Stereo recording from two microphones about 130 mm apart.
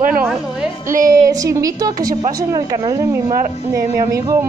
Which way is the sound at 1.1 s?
25° right (ahead or behind).